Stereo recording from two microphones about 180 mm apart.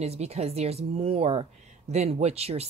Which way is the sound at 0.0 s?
35° right (ahead or behind).